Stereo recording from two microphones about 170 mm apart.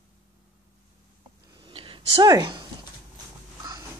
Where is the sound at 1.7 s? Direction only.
30° right (ahead or behind).